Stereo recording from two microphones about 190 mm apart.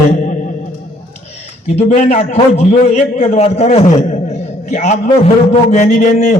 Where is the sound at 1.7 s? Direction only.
35° left (ahead or behind).